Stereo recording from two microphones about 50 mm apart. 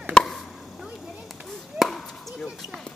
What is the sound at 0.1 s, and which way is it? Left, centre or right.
Chop, centre.